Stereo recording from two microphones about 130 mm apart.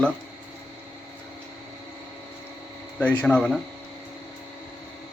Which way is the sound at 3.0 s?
10° left (ahead or behind).